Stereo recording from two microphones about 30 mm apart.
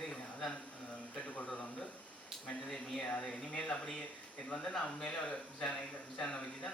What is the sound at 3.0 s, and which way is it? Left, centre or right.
Speech, left.